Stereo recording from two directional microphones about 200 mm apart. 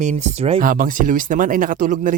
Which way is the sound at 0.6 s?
45° right (ahead or behind).